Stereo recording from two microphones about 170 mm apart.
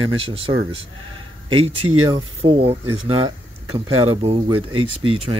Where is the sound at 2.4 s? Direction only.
35° right (ahead or behind).